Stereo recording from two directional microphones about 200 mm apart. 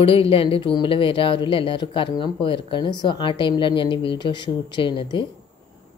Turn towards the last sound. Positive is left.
turn(degrees=25)  # may be behind; listen again after turning